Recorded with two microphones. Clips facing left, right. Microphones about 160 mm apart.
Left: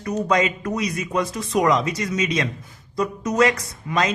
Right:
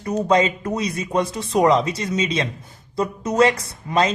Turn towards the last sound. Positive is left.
turn(degrees=-30)  # may be behind; listen again after turning